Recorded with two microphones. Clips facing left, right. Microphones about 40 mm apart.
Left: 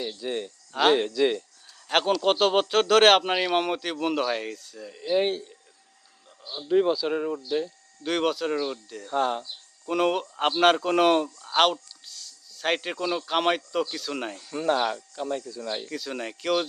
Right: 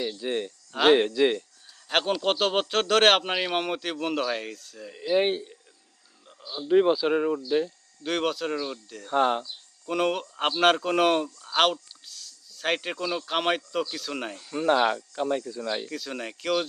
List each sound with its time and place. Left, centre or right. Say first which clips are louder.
0.2 s speech: right 2 dB; centre
1.9 s a man's voice: left 2 dB; centre
4.9 s speech: right 1 dB; centre
6.7 s speech: right 2 dB; centre
8.0 s a man's voice: left 2 dB; centre
9.0 s speech: right 2 dB; right
9.8 s a man's voice: left 2 dB; centre
14.7 s speech: right 2 dB; right
15.9 s a man's voice: left 1 dB; centre